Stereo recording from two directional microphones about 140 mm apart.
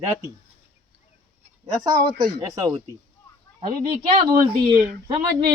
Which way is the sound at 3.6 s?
35° right (ahead or behind).